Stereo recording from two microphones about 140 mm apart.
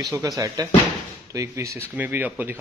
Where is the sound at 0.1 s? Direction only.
25° right (ahead or behind).